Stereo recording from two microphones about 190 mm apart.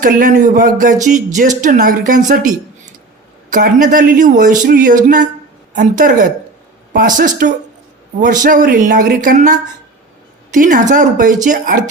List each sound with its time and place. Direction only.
0.0 s speech: 45° right (ahead or behind)
3.5 s a man's voice: 45° right (ahead or behind)